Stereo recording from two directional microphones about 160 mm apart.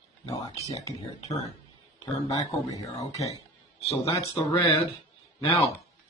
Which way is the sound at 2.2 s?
20° left (ahead or behind).